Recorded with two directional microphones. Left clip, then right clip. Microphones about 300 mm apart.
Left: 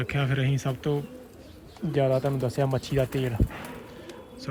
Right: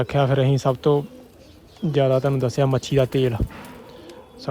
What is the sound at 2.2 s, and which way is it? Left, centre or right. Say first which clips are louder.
Speech: right 6 dB; left.